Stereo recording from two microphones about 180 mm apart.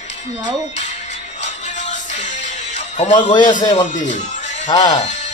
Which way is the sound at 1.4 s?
40° left (ahead or behind).